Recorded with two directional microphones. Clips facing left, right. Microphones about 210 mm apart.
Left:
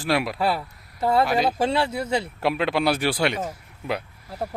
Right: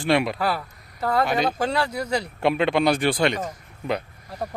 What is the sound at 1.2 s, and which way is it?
Speech, centre (ahead or behind).